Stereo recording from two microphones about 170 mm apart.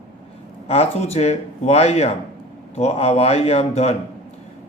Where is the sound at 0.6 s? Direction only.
40° left (ahead or behind).